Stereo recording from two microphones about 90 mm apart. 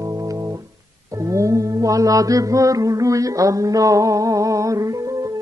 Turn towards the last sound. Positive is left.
turn(degrees=-40)  # may be behind; listen again after turning